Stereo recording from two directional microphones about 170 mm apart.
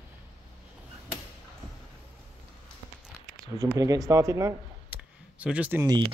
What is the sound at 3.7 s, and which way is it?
Speech, 20° right (ahead or behind).